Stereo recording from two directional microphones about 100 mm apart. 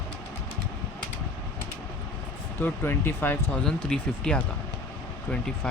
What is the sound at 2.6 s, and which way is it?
Speech, 20° left (ahead or behind).